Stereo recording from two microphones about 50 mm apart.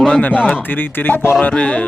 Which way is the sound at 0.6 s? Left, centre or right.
Left.